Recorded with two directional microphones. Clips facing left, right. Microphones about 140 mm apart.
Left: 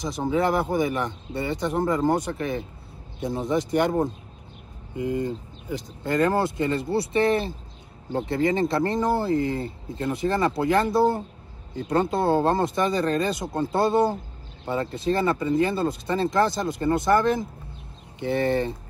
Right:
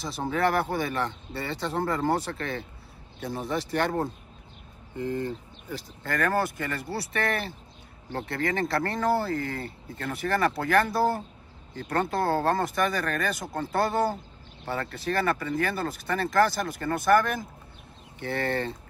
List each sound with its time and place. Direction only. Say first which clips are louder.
0.0 s speech: left 3 dB; 15° left (ahead or behind)